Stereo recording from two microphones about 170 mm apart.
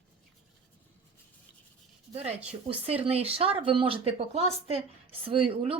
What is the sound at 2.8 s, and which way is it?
A woman's voice, 35° right (ahead or behind).